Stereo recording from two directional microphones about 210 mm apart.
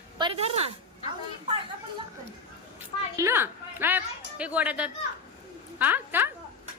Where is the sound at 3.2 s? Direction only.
10° right (ahead or behind).